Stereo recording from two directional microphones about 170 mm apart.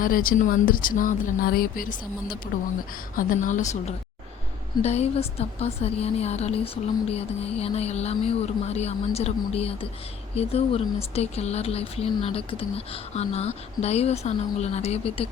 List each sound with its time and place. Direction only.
0.0 s speech: 55° left (ahead or behind)
3.2 s a woman's voice: 50° left (ahead or behind)